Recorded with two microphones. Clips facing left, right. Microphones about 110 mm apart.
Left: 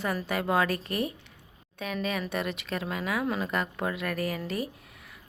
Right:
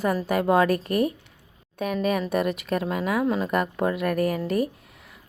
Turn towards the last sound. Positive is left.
turn(degrees=-45)  # may be behind; listen again after turning